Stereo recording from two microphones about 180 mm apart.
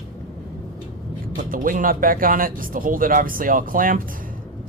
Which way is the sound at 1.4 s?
50° right (ahead or behind).